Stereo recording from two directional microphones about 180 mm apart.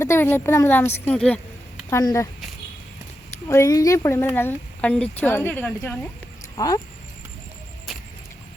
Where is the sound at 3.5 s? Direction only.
15° left (ahead or behind).